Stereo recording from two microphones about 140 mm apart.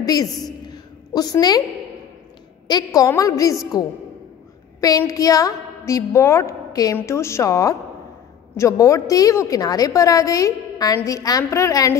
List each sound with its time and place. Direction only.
0.0 s a woman's voice: 25° left (ahead or behind)
2.7 s a woman's voice: 25° left (ahead or behind)